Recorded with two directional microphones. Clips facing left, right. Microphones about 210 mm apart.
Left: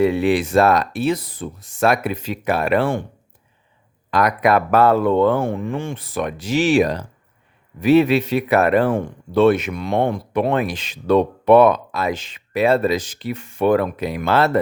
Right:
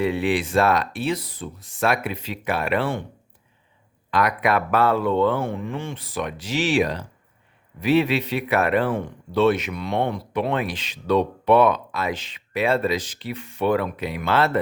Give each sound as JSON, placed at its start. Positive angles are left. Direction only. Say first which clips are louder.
{"t": 0.0, "sound": "speech", "louder": "left 5 dB", "side_deg": 45}
{"t": 4.1, "sound": "speech", "louder": "left 4 dB", "side_deg": 40}